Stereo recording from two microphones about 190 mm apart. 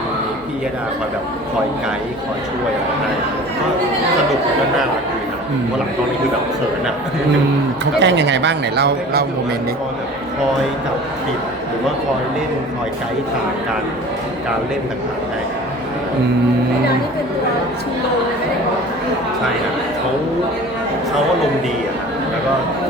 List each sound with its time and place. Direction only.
7.9 s speech: 65° right (ahead or behind)